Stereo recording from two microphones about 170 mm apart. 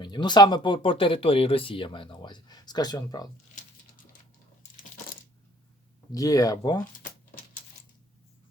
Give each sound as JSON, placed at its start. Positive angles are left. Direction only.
{"t": 0.0, "sound": "speech", "side_deg": 25}
{"t": 6.1, "sound": "speech", "side_deg": 20}